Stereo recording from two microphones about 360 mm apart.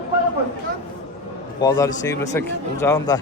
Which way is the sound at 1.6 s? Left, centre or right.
Centre.